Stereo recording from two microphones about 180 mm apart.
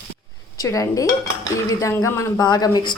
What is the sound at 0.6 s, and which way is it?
Speech, 20° left (ahead or behind).